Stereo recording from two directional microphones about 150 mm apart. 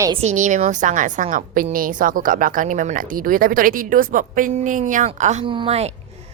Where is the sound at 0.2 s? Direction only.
50° right (ahead or behind).